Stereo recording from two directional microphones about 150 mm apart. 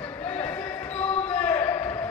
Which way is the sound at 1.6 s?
25° left (ahead or behind).